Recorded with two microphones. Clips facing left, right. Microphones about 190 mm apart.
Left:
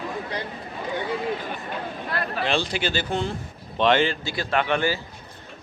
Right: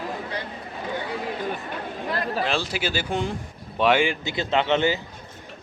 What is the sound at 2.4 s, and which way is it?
A man's voice, centre (ahead or behind).